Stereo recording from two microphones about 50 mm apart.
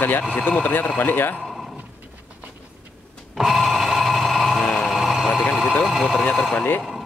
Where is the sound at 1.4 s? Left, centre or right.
Centre.